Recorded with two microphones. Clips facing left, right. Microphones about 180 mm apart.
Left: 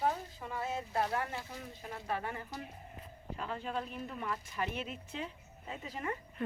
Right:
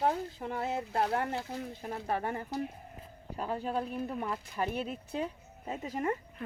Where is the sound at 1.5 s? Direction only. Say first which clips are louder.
Right 7 dB; 35° right (ahead or behind).